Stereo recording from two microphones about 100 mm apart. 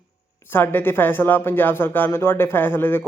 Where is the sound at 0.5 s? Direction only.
20° left (ahead or behind).